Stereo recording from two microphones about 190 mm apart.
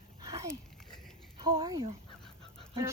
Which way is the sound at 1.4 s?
25° right (ahead or behind).